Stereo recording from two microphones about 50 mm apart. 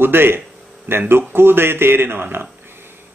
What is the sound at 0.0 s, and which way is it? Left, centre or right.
Speech, right.